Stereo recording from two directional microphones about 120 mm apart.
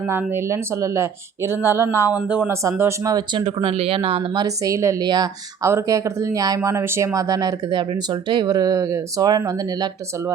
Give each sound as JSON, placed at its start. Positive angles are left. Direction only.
{"t": 0.1, "sound": "speech", "side_deg": -20}
{"t": 2.5, "sound": "speech", "side_deg": -20}
{"t": 3.4, "sound": "speech", "side_deg": -50}
{"t": 4.4, "sound": "speech", "side_deg": -30}
{"t": 5.6, "sound": "speech", "side_deg": -25}